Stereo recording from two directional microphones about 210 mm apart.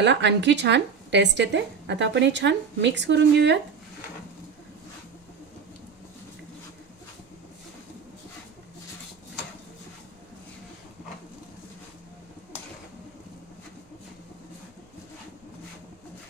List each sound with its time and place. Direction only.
0.0 s speech: 55° right (ahead or behind)